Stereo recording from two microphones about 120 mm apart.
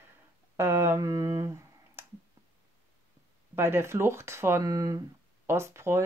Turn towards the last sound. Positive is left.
turn(degrees=-20)  # may be behind; listen again after turning